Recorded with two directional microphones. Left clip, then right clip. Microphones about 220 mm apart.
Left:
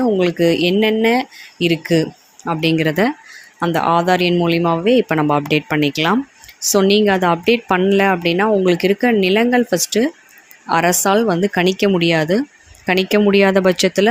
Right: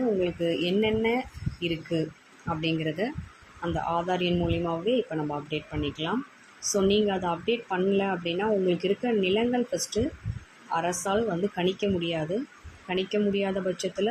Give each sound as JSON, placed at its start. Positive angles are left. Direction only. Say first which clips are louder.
{"t": 0.2, "sound": "speech", "louder": "left 12 dB", "side_deg": 40}